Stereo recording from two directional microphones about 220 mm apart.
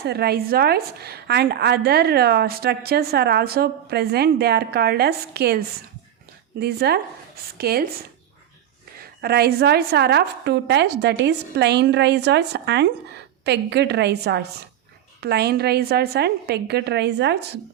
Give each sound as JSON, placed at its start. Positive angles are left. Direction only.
{"t": 0.0, "sound": "a woman's voice", "side_deg": -45}
{"t": 6.6, "sound": "a woman's voice", "side_deg": -45}
{"t": 9.2, "sound": "a woman's voice", "side_deg": -45}